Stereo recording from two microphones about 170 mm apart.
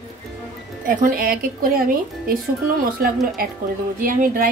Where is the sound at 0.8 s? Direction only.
55° right (ahead or behind).